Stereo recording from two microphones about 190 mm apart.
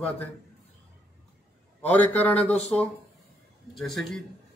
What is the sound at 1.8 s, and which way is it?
Speech, 10° left (ahead or behind).